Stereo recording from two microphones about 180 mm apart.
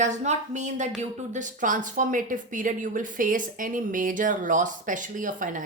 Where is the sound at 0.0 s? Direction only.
40° right (ahead or behind).